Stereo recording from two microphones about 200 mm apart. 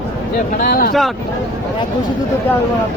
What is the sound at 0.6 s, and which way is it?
Speech, 50° left (ahead or behind).